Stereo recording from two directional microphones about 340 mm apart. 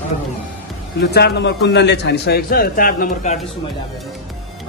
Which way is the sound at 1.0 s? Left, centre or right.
Left.